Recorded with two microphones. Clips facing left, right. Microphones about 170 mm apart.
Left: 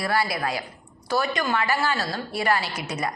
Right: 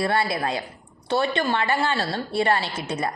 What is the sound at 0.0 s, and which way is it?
A woman's voice, 25° right (ahead or behind).